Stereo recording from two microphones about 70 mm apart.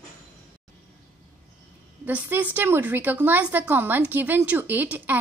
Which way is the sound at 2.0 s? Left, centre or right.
Right.